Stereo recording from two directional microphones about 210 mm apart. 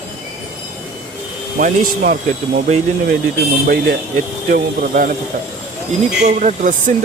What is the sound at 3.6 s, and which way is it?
Speech, 45° right (ahead or behind).